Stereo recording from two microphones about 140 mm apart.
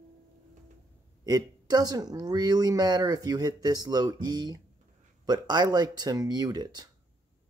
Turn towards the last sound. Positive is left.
turn(degrees=-30)  # may be behind; listen again after turning